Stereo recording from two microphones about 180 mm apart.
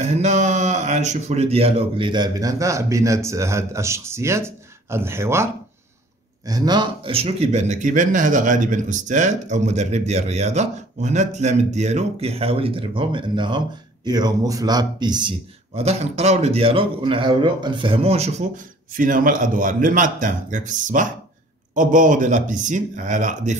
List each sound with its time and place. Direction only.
0.0 s speech: 40° right (ahead or behind)
18.9 s a man's voice: 50° right (ahead or behind)